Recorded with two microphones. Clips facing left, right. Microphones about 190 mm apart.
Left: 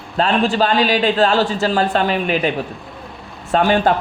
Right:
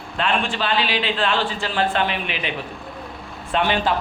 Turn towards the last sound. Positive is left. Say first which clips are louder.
# left 6 dB
turn(degrees=45)  # may be behind; listen again after turning